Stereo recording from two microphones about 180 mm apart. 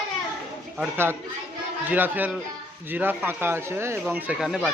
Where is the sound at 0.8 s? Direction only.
15° right (ahead or behind).